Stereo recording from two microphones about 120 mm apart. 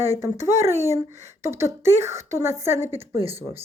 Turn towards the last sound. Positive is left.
turn(degrees=-20)  # may be behind; listen again after turning